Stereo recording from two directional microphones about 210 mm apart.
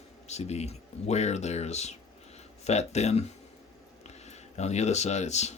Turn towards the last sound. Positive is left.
turn(degrees=30)  # may be behind; listen again after turning